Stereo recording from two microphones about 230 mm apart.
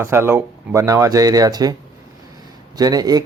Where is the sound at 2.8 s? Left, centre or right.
Centre.